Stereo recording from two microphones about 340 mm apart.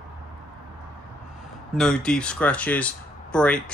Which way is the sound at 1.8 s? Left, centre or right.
Centre.